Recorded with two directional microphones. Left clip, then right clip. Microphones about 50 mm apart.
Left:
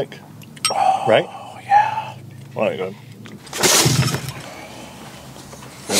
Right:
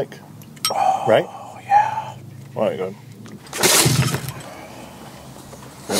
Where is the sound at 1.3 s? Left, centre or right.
Centre.